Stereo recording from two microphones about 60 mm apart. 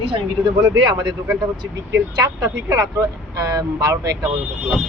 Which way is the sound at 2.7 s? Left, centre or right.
Right.